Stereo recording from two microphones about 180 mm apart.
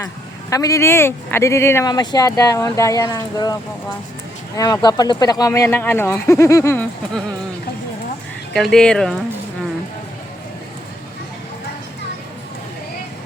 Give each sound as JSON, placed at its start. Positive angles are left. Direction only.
{"t": 0.5, "sound": "speech", "side_deg": 20}
{"t": 8.5, "sound": "speech", "side_deg": 0}